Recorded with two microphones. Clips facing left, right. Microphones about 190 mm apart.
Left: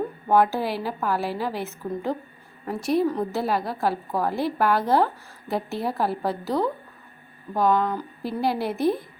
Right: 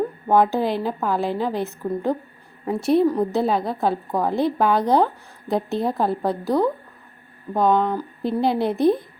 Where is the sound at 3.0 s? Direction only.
15° right (ahead or behind).